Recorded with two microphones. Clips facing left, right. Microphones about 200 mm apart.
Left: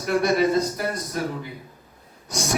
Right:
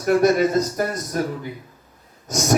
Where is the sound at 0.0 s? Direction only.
45° right (ahead or behind).